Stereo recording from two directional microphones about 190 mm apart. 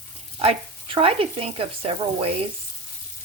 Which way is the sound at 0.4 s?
30° right (ahead or behind).